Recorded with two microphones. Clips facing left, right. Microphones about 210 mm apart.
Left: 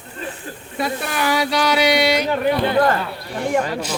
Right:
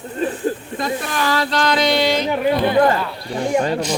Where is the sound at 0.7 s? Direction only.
10° left (ahead or behind).